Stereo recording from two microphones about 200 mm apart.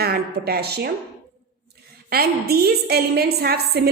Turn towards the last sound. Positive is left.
turn(degrees=-50)  # may be behind; listen again after turning